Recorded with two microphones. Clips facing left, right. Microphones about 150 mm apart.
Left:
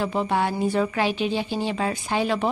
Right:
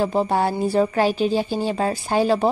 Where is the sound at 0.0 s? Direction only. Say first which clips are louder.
Right 4 dB; 35° right (ahead or behind).